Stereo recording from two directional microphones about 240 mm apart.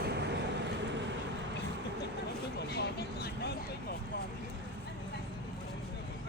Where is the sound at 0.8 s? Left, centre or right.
Right.